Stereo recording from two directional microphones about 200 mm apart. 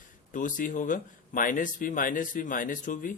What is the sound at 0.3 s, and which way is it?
Speech, 40° left (ahead or behind).